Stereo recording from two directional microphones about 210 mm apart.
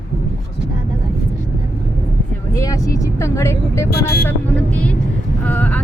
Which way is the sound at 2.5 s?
15° left (ahead or behind).